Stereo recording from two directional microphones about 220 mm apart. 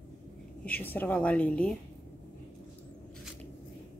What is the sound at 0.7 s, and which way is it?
A woman's voice, 10° left (ahead or behind).